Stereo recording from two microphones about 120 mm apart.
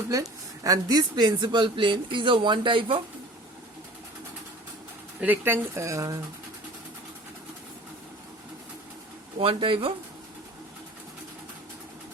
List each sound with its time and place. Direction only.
0.1 s speech: 30° right (ahead or behind)
5.2 s speech: 15° right (ahead or behind)
9.4 s speech: 50° right (ahead or behind)